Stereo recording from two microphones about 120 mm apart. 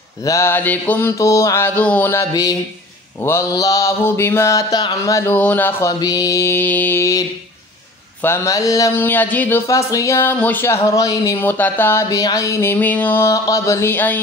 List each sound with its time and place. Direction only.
0.2 s speech: 25° left (ahead or behind)
5.9 s speech: 30° left (ahead or behind); by 9.6 s 15° left (ahead or behind)
9.7 s speech: 25° left (ahead or behind)